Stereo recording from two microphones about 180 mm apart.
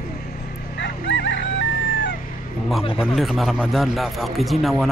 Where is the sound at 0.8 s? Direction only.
80° left.